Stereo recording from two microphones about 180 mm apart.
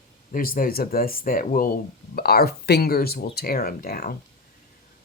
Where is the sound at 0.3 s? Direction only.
50° left (ahead or behind).